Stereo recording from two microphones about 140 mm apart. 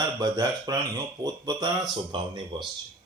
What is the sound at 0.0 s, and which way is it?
A man's voice, 25° right (ahead or behind).